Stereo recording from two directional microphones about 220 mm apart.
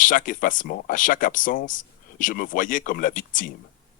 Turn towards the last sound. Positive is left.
turn(degrees=35)  # may be behind; listen again after turning